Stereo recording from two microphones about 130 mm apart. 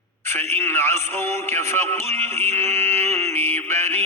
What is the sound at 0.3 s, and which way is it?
Music, 20° left (ahead or behind).